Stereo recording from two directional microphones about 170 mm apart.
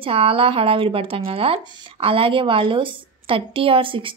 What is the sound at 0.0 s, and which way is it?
Speech, 35° right (ahead or behind).